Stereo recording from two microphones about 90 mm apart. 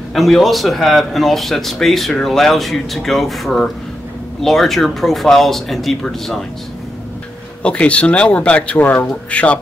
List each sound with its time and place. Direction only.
0.1 s speech: centre (ahead or behind)
7.6 s speech: 15° left (ahead or behind)